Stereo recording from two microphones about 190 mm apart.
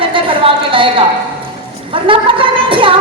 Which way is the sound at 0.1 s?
25° right (ahead or behind).